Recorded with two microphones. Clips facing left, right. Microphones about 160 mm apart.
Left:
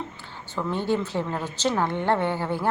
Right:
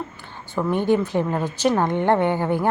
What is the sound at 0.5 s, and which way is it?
A woman's voice, 15° right (ahead or behind).